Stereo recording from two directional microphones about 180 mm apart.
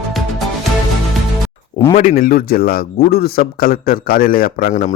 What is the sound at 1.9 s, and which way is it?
Speech, 50° left (ahead or behind).